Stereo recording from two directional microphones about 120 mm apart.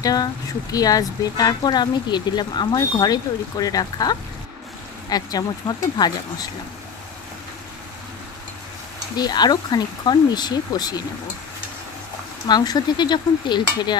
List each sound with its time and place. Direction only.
0.0 s speech: 30° left (ahead or behind)
9.1 s speech: 35° left (ahead or behind)
12.4 s speech: 35° left (ahead or behind)